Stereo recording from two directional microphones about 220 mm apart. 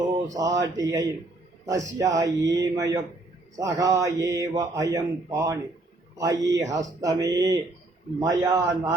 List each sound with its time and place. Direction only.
0.3 s speech: 15° right (ahead or behind)